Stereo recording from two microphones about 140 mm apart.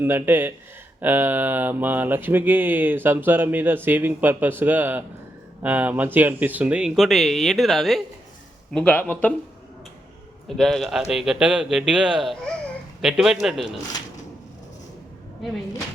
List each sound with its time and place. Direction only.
0.0 s mantra: 15° right (ahead or behind)
5.6 s speech: 10° right (ahead or behind); by 9.3 s 10° left (ahead or behind)
10.6 s speech: centre (ahead or behind)